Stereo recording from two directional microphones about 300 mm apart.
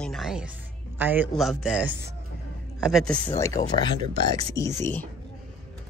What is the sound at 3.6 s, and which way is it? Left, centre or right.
Speech, centre.